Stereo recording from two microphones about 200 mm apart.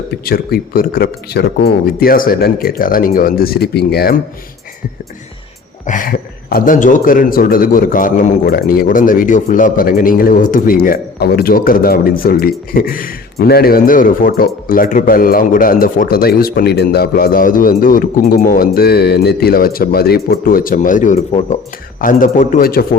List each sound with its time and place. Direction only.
0.3 s a man's voice: 50° left (ahead or behind)
5.8 s a man's voice: 40° left (ahead or behind)